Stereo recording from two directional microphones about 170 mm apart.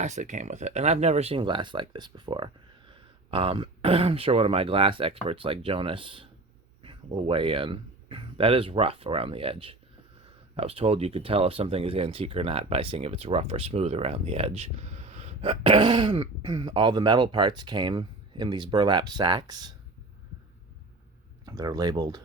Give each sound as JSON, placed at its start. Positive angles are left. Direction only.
{"t": 0.0, "sound": "speech", "side_deg": -45}
{"t": 21.4, "sound": "speech", "side_deg": -20}